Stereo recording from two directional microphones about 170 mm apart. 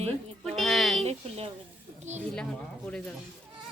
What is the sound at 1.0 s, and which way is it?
A woman's voice, 35° right (ahead or behind).